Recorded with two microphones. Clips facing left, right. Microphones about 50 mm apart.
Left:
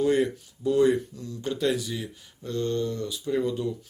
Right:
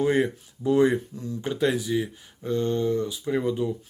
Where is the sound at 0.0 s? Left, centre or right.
Right.